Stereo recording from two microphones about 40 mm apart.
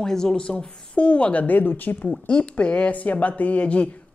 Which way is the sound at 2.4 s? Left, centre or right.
Left.